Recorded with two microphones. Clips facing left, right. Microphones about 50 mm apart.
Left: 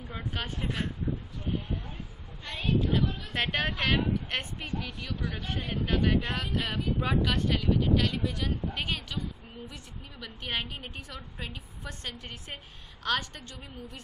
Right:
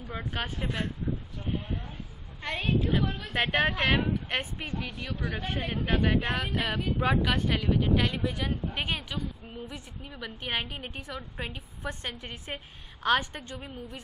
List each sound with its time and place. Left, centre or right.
0.1 s a woman's voice: centre
2.4 s a woman's voice: centre
5.3 s a woman's voice: centre